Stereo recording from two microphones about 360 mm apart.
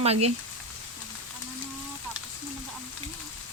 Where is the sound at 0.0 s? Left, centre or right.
Centre.